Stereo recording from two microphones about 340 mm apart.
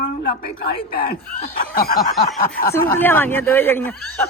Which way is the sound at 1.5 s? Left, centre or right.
Left.